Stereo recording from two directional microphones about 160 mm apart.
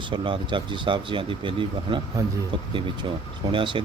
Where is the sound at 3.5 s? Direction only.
30° right (ahead or behind).